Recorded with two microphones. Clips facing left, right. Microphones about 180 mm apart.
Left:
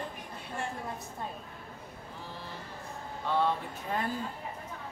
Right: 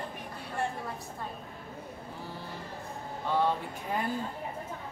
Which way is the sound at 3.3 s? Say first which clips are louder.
Right 1 dB; 10° right (ahead or behind).